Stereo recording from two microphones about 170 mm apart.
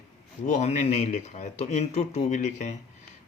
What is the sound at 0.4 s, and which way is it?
Speech, 45° left (ahead or behind).